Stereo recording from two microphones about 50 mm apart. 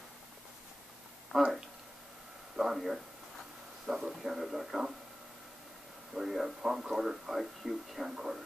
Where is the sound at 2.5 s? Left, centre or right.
Centre.